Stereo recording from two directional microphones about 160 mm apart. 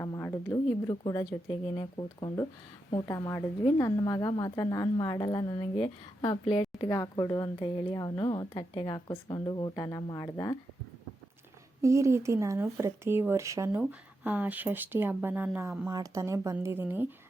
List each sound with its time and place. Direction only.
0.0 s a woman's voice: 15° left (ahead or behind); by 6.7 s 35° left (ahead or behind)
6.8 s speech: 20° left (ahead or behind)
11.8 s speech: 20° right (ahead or behind)
15.9 s speech: 25° right (ahead or behind)